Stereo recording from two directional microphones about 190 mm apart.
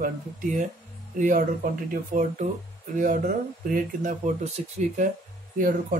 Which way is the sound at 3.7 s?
40° right (ahead or behind).